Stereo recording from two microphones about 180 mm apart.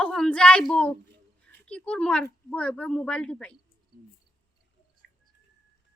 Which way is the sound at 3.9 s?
60° right (ahead or behind).